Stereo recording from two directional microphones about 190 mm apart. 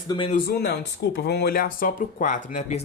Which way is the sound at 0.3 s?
50° left (ahead or behind).